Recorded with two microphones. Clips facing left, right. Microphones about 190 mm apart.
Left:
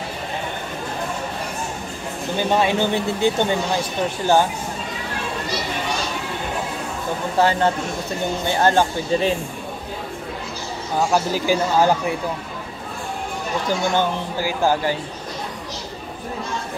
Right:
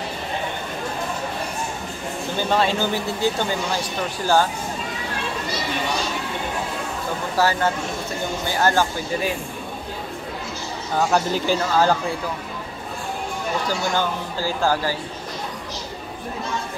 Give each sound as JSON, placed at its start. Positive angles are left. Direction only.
{"t": 2.5, "sound": "speech", "side_deg": 15}
{"t": 7.3, "sound": "speech", "side_deg": 25}
{"t": 11.0, "sound": "speech", "side_deg": 10}
{"t": 13.7, "sound": "speech", "side_deg": 20}